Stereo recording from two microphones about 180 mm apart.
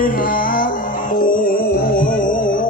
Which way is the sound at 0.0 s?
50° left (ahead or behind).